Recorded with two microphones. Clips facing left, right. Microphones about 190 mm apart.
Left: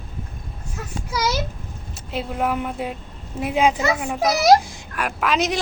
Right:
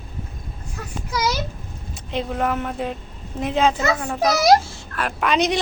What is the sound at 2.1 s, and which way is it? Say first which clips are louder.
Speech: right 1 dB; 5° left (ahead or behind).